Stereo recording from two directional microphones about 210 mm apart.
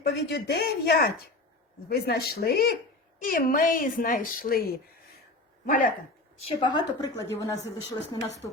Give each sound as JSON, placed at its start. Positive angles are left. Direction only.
{"t": 0.0, "sound": "a woman's voice", "side_deg": 50}
{"t": 6.6, "sound": "a woman's voice", "side_deg": 20}